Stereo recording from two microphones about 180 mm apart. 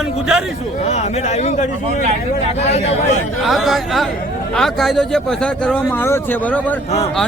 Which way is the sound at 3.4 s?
Centre (ahead or behind).